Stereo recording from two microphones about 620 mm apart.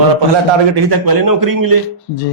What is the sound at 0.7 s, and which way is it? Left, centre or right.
A man's voice, right.